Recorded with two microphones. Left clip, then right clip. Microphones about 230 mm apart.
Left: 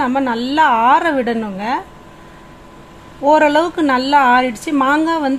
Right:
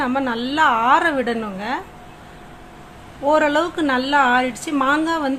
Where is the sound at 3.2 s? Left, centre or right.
Centre.